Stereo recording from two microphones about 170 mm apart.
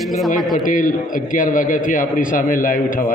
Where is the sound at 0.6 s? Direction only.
50° left (ahead or behind).